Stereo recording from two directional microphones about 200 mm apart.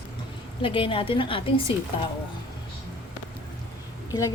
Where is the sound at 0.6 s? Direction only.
25° left (ahead or behind).